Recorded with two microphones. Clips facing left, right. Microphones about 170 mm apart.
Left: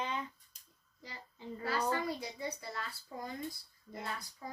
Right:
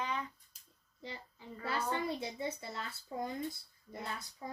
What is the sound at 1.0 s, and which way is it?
Speech, 25° right (ahead or behind).